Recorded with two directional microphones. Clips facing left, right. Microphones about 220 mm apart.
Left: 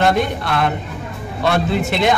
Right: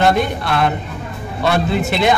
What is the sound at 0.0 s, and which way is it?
A man's voice, centre (ahead or behind).